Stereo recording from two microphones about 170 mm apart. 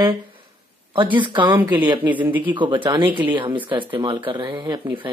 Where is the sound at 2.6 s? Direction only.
30° right (ahead or behind).